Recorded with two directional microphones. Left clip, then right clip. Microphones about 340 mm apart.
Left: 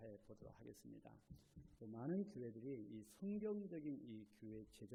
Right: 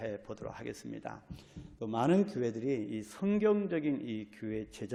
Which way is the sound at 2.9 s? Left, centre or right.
Centre.